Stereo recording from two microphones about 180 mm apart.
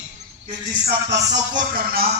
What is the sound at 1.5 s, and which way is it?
Speech, 55° right (ahead or behind).